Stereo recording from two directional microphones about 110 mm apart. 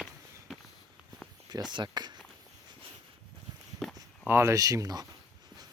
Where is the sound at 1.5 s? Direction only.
40° right (ahead or behind).